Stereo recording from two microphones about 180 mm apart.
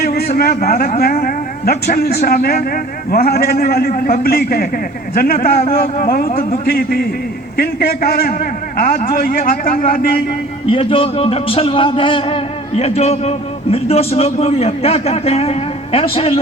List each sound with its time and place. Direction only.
0.0 s a man's voice: 60° left (ahead or behind)
5.6 s a man's voice: 35° left (ahead or behind)
6.1 s a man's voice: 55° left (ahead or behind)
10.7 s a man's voice: 30° left (ahead or behind)